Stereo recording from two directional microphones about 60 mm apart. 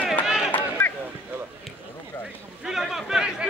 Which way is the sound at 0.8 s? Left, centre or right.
Left.